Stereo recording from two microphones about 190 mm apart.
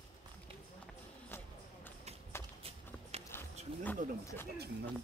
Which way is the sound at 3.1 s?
35° right (ahead or behind).